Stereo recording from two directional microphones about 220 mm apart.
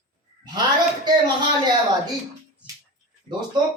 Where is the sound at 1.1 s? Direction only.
20° right (ahead or behind).